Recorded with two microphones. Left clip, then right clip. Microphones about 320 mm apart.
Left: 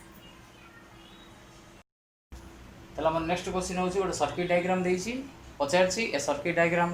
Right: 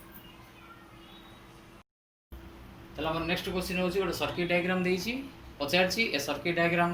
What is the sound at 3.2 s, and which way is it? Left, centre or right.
Speech, centre.